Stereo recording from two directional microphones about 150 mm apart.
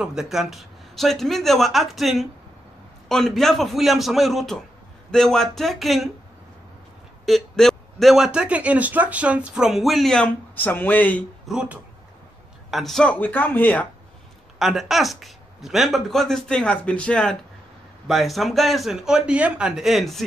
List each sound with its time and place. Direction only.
0.0 s speech: 5° right (ahead or behind)
7.2 s speech: centre (ahead or behind)
11.4 s speech: 5° right (ahead or behind); by 13.8 s 10° left (ahead or behind)
14.6 s speech: centre (ahead or behind)